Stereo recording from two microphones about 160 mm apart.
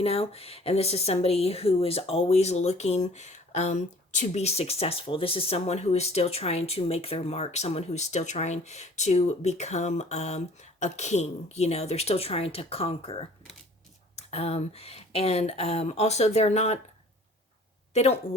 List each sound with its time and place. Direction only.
0.0 s speech: 40° left (ahead or behind)
17.9 s speech: 40° left (ahead or behind)